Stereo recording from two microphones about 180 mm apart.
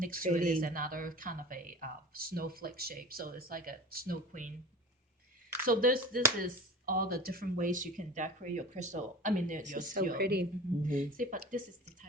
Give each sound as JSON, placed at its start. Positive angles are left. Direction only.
{"t": 0.0, "sound": "speech", "side_deg": -50}
{"t": 5.6, "sound": "speech", "side_deg": -50}
{"t": 10.8, "sound": "speech", "side_deg": -50}